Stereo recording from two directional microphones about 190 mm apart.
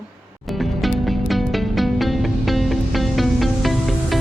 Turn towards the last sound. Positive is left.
turn(degrees=0)  # may be behind; listen again after turning